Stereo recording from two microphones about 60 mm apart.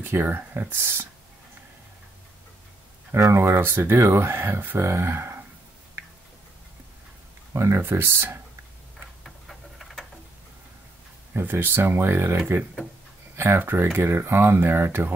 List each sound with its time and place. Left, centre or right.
0.0 s speech: right
3.1 s speech: right
7.5 s speech: right
9.2 s a sound: centre
11.3 s speech: right
13.4 s speech: right